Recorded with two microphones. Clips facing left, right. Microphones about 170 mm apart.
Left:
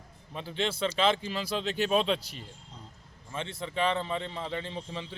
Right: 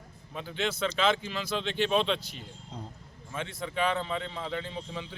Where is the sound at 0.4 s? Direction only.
30° left (ahead or behind).